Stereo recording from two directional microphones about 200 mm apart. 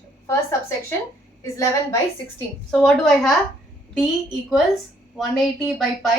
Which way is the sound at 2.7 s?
5° left (ahead or behind).